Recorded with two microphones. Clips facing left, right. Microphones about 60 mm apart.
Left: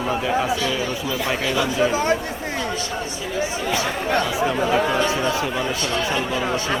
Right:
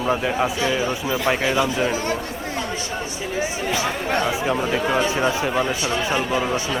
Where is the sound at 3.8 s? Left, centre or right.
Centre.